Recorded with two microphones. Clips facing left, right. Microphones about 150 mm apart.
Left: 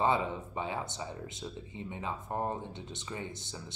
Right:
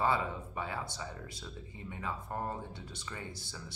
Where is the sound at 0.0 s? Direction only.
20° left (ahead or behind).